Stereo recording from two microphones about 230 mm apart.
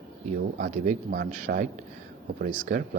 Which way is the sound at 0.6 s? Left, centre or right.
Right.